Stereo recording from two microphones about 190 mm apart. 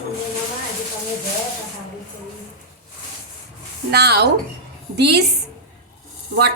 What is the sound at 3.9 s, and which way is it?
Speech, 60° right (ahead or behind).